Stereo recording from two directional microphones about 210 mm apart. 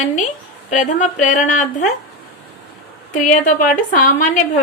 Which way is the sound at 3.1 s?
35° left (ahead or behind).